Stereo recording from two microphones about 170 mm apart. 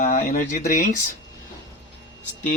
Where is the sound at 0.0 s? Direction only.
50° left (ahead or behind).